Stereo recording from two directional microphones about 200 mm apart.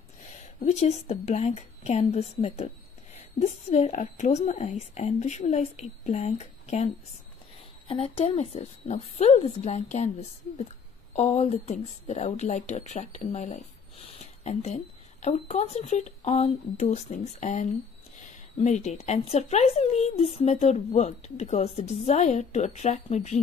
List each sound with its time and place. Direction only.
0.7 s speech: 35° left (ahead or behind)
7.9 s speech: 30° left (ahead or behind)
11.1 s speech: 35° left (ahead or behind)